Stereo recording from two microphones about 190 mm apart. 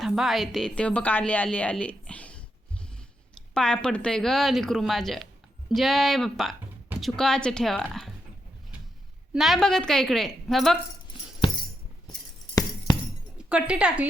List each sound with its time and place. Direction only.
0.0 s a woman's voice: centre (ahead or behind)
3.5 s a woman's voice: 5° left (ahead or behind)
9.3 s a woman's voice: centre (ahead or behind)
11.1 s music: 25° left (ahead or behind)
13.5 s a woman's voice: 5° right (ahead or behind)